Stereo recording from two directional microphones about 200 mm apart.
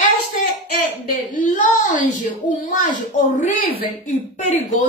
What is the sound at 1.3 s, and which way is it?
Speech, 40° left (ahead or behind).